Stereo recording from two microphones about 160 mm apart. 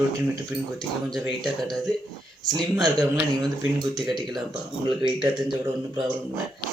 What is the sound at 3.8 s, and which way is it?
Speech, 25° right (ahead or behind).